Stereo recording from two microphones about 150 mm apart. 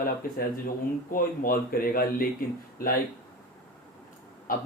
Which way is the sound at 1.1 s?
70° left (ahead or behind).